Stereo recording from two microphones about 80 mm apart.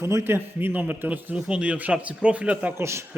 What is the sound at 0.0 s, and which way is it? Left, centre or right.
Speech, right.